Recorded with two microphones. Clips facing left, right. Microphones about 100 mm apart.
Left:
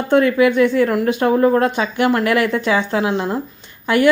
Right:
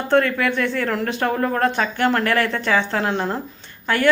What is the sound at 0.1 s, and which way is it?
A woman's voice, 15° left (ahead or behind).